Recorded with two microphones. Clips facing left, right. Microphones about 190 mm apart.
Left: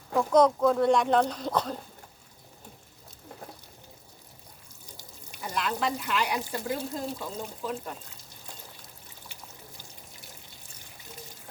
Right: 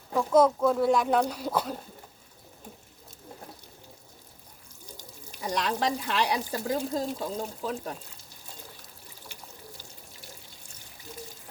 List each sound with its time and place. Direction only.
0.1 s speech: centre (ahead or behind)
5.5 s speech: 35° right (ahead or behind)